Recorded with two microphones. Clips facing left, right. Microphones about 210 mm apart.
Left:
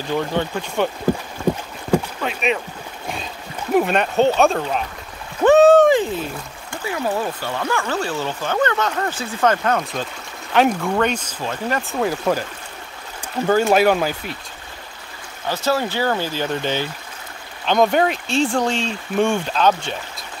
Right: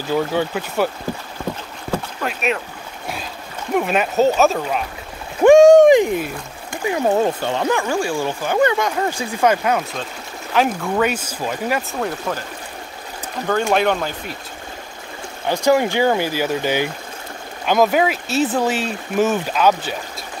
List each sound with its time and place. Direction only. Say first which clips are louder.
0.1 s speech: right 2 dB; 10° right (ahead or behind)
2.2 s speech: even; centre (ahead or behind)
3.7 s speech: left 1 dB; 5° right (ahead or behind)
5.4 s a sound: right 3 dB; 15° right (ahead or behind)
7.2 s speech: right 6 dB; 25° right (ahead or behind)
7.8 s speech: right 3 dB; 10° right (ahead or behind)
13.5 s speech: left 2 dB; 5° left (ahead or behind)
15.4 s speech: right 5 dB; 15° right (ahead or behind)